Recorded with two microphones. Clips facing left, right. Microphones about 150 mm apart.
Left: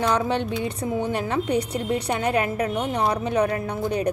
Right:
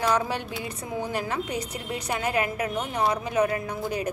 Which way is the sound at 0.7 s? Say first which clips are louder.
Left 6 dB; 30° left (ahead or behind).